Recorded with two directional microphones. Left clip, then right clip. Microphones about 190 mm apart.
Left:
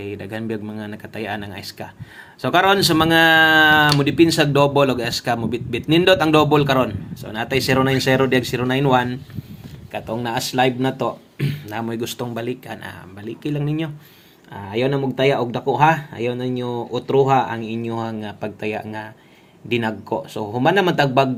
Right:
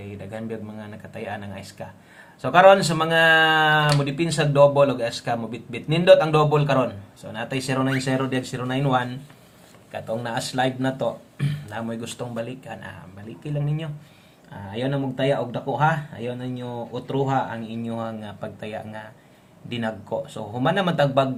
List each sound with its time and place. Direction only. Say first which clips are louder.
0.0 s speech: left 6 dB; 35° left (ahead or behind)